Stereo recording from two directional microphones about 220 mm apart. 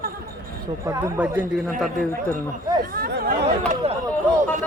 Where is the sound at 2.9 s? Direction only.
45° right (ahead or behind).